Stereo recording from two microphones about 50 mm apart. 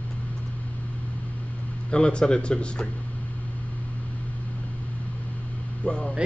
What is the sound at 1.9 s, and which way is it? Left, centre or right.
Speech, centre.